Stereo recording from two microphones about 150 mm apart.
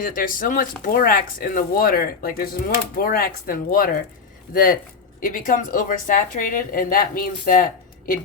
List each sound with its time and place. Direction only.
0.0 s speech: 65° left (ahead or behind)